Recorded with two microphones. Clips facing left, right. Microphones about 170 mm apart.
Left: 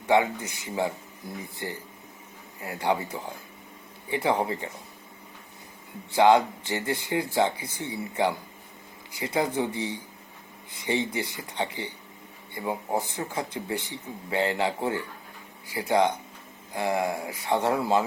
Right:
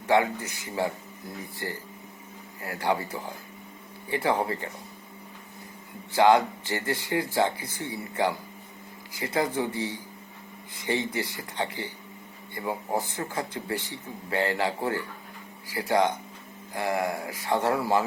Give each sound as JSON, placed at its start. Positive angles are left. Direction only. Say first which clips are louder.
{"t": 0.1, "sound": "speech", "louder": "left 1 dB", "side_deg": 20}
{"t": 6.1, "sound": "speech", "louder": "left 1 dB", "side_deg": 20}